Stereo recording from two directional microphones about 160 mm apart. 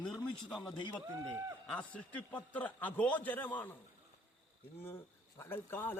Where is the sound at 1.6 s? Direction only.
5° left (ahead or behind).